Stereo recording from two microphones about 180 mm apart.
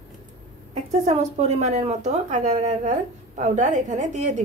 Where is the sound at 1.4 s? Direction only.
35° right (ahead or behind).